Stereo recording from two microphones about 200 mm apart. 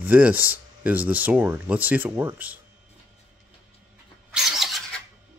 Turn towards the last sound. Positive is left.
turn(degrees=0)  # may be behind; listen again after turning